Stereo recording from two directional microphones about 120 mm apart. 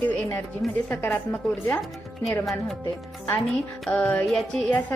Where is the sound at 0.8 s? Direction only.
20° left (ahead or behind).